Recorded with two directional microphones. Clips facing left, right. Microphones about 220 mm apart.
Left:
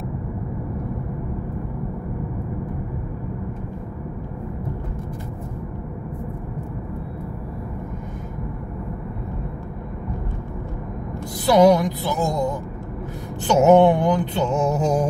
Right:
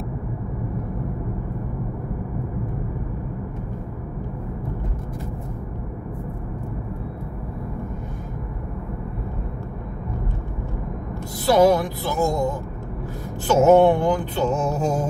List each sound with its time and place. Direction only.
11.4 s music: 20° left (ahead or behind)